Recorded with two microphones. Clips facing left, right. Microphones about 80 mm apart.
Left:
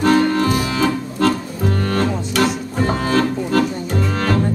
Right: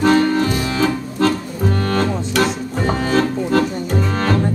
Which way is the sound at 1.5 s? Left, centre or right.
Centre.